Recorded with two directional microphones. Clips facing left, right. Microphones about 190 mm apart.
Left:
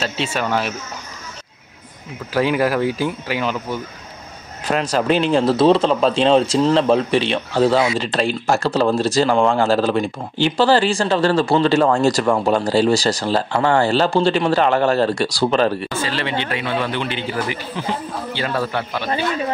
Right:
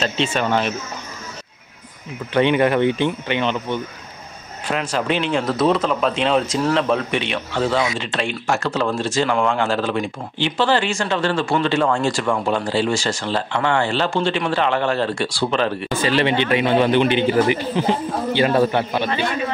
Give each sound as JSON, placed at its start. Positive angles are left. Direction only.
{"t": 0.0, "sound": "speech", "side_deg": 5}
{"t": 2.3, "sound": "speech", "side_deg": 5}
{"t": 4.6, "sound": "a man's voice", "side_deg": 40}
{"t": 15.9, "sound": "speech", "side_deg": -15}